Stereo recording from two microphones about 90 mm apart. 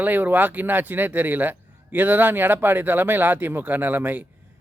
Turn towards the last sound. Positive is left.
turn(degrees=-20)  # may be behind; listen again after turning